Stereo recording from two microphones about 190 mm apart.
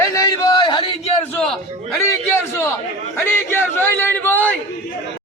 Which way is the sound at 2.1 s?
15° left (ahead or behind).